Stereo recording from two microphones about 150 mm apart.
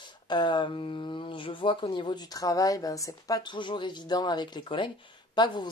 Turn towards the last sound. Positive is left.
turn(degrees=30)  # may be behind; listen again after turning